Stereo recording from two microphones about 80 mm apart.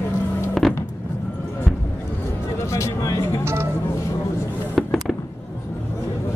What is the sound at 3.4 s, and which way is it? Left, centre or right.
Vehicle, right.